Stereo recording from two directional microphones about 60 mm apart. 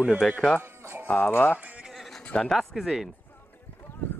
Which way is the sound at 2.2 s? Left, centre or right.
Centre.